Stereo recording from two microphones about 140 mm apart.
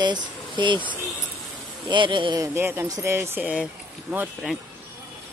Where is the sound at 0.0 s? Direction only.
35° right (ahead or behind).